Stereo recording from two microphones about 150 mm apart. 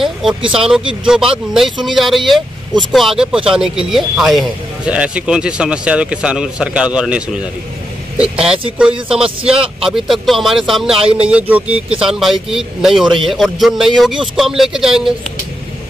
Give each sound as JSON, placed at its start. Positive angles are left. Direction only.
{"t": 0.0, "sound": "a man's voice", "side_deg": -5}
{"t": 9.8, "sound": "a man's voice", "side_deg": 0}
{"t": 11.0, "sound": "speech", "side_deg": -40}
{"t": 11.2, "sound": "a man's voice", "side_deg": -10}